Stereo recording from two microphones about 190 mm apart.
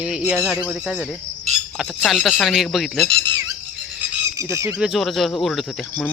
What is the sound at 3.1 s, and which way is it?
Speech, 30° right (ahead or behind).